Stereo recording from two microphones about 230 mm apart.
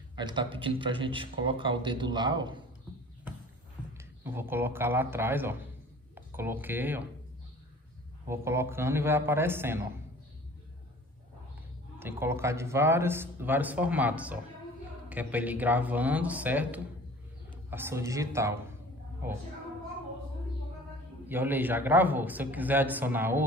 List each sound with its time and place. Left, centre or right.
0.1 s speech: centre
4.2 s speech: centre
8.3 s speech: centre
12.0 s speech: centre
21.3 s speech: centre